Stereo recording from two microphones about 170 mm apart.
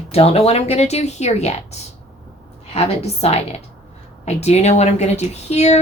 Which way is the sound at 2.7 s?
35° left (ahead or behind).